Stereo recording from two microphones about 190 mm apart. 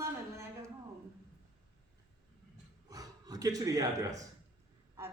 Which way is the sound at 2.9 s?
20° right (ahead or behind).